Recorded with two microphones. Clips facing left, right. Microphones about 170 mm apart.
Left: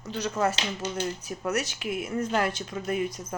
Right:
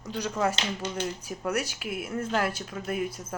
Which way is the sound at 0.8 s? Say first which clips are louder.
Left 3 dB; 5° left (ahead or behind).